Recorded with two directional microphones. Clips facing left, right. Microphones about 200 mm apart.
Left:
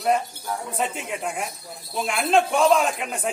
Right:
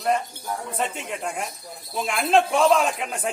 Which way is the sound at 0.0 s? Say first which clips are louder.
Left 1 dB; 5° left (ahead or behind).